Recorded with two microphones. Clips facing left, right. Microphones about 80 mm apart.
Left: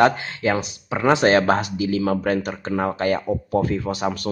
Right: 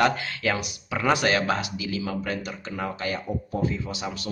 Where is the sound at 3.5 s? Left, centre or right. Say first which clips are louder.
Left 7 dB; left.